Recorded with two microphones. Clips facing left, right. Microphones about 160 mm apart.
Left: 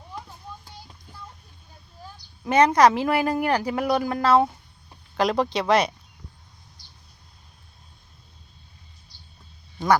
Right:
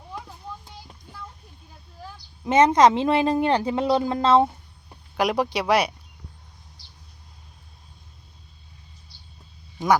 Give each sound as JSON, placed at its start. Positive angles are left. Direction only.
{"t": 2.4, "sound": "a woman's voice", "side_deg": -20}
{"t": 4.4, "sound": "a sound", "side_deg": -10}
{"t": 9.7, "sound": "speech", "side_deg": -15}